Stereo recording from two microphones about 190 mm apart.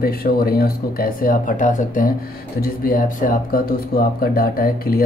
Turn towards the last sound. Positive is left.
turn(degrees=50)  # may be behind; listen again after turning